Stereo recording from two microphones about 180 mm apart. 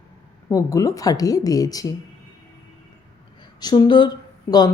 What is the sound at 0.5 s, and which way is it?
A woman's voice, 20° left (ahead or behind).